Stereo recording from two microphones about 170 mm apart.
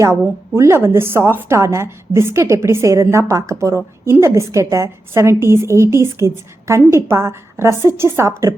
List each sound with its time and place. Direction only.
0.0 s a woman's voice: 15° right (ahead or behind)